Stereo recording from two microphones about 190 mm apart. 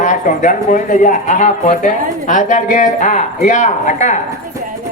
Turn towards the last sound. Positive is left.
turn(degrees=40)  # may be behind; listen again after turning